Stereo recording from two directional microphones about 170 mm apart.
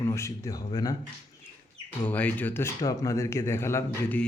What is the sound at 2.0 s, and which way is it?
Speech, 10° left (ahead or behind).